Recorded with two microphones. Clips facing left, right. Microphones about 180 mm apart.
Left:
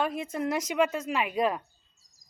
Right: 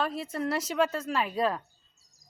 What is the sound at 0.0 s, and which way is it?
A woman's voice, 15° left (ahead or behind).